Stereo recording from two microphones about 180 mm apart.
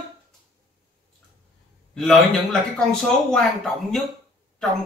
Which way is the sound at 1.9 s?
Centre (ahead or behind).